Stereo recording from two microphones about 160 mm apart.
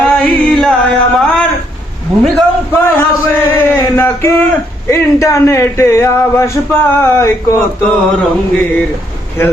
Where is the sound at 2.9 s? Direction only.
15° left (ahead or behind).